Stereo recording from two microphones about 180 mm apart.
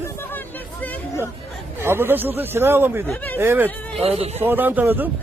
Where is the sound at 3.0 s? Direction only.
10° left (ahead or behind).